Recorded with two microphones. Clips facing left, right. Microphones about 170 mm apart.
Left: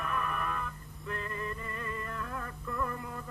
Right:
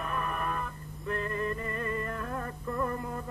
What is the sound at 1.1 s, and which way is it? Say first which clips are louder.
Music: right 6 dB; 50° right (ahead or behind).